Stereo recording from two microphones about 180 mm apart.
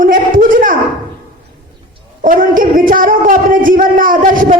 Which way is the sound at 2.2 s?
50° right (ahead or behind).